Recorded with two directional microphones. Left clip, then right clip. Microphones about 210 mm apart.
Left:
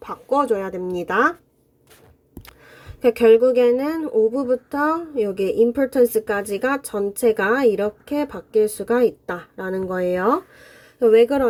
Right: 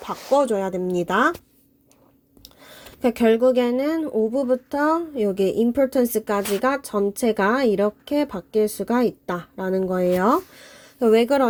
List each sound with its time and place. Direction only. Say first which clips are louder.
0.0 s a woman's voice: right 1 dB; 35° right (ahead or behind)
2.4 s a woman's voice: right 1 dB; 35° right (ahead or behind)